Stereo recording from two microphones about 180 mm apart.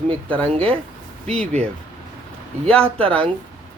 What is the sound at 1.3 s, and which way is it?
Speech, 5° left (ahead or behind).